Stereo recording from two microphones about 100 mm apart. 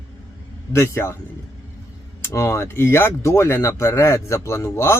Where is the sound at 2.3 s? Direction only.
30° left (ahead or behind).